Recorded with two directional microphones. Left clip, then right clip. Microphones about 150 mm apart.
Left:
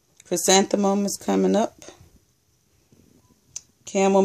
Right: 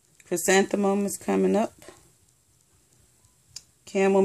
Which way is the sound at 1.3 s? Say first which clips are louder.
Left 2 dB; 25° left (ahead or behind).